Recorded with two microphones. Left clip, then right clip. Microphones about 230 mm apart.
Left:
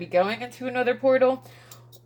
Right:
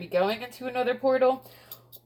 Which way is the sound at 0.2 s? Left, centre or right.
Left.